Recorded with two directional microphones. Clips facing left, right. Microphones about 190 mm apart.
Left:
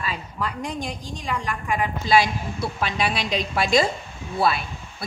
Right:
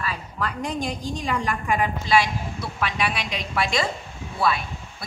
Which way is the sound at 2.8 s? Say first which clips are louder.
Even; 35° left (ahead or behind).